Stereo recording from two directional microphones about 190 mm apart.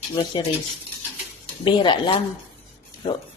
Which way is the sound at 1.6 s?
25° left (ahead or behind).